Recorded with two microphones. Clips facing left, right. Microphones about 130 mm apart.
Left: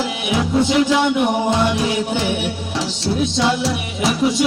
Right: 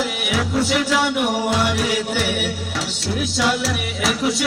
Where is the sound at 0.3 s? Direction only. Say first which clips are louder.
Left 5 dB; 25° left (ahead or behind).